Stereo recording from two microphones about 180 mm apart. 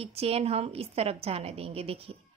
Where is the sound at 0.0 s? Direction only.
35° right (ahead or behind).